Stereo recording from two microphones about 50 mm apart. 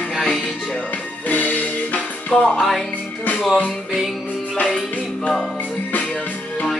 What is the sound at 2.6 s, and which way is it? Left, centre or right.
Music, centre.